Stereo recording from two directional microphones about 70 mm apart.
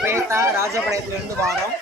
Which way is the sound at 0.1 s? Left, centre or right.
Right.